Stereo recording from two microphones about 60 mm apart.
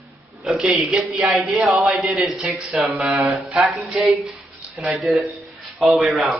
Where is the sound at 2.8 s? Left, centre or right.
Right.